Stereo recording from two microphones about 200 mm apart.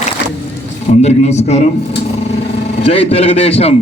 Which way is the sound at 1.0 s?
35° left (ahead or behind).